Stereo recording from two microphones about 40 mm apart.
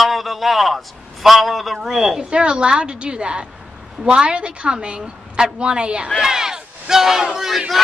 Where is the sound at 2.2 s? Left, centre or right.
Right.